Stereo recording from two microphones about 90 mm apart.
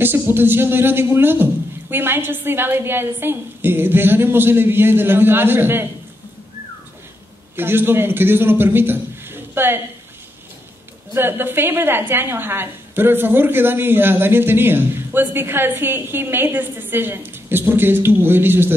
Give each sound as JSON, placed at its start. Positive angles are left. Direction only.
{"t": 0.0, "sound": "a woman's voice", "side_deg": -25}
{"t": 7.5, "sound": "a man's voice", "side_deg": -25}
{"t": 11.1, "sound": "a woman's voice", "side_deg": -25}